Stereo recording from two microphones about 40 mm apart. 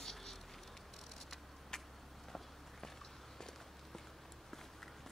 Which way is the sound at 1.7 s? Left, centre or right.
Centre.